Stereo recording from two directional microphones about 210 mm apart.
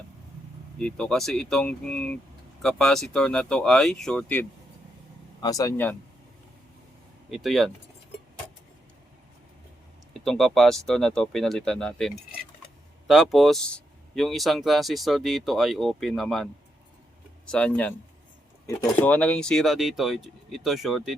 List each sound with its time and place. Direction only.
0.8 s speech: 5° left (ahead or behind)
5.4 s speech: 15° left (ahead or behind)
7.3 s speech: centre (ahead or behind)
10.2 s speech: centre (ahead or behind)